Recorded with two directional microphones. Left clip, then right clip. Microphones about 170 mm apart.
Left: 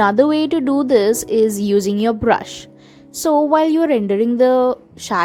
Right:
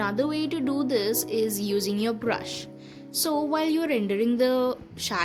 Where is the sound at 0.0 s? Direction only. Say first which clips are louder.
Left 13 dB; 50° left (ahead or behind).